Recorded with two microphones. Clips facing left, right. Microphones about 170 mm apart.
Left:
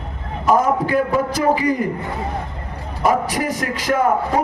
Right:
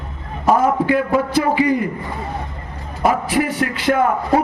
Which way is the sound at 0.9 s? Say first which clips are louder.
Right 1 dB; 40° left (ahead or behind).